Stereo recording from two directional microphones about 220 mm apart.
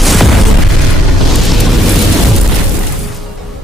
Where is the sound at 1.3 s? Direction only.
Centre (ahead or behind).